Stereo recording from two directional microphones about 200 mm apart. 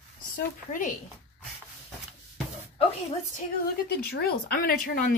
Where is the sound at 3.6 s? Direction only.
50° left (ahead or behind).